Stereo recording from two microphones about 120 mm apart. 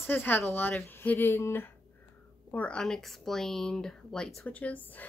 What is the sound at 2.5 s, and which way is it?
Speech, 10° left (ahead or behind).